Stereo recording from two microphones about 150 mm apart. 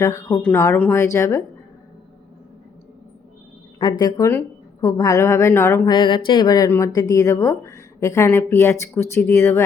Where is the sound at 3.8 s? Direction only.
25° left (ahead or behind).